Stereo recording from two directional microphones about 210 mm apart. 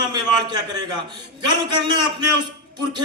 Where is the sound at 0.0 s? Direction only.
20° right (ahead or behind).